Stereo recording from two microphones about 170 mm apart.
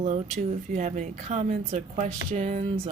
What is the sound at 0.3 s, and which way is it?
Speech, 45° right (ahead or behind).